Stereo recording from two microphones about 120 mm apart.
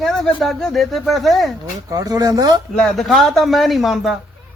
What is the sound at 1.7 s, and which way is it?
Speech, 30° right (ahead or behind).